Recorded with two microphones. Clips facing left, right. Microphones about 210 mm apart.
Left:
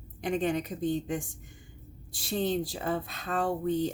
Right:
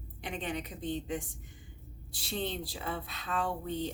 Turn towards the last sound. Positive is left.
turn(degrees=45)  # may be behind; listen again after turning